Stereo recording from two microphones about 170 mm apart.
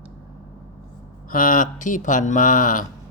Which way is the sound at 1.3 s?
55° left (ahead or behind).